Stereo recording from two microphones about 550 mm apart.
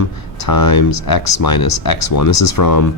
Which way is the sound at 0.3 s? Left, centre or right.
Left.